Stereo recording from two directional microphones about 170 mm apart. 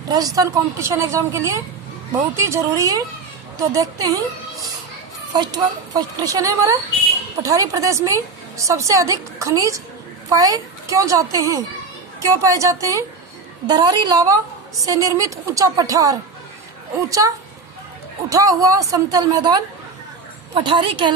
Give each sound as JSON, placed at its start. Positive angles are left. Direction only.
{"t": 0.1, "sound": "a woman's voice", "side_deg": -20}
{"t": 5.3, "sound": "a woman's voice", "side_deg": -25}